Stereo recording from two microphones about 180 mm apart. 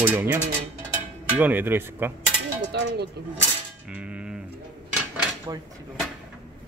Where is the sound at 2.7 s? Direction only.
70° right (ahead or behind).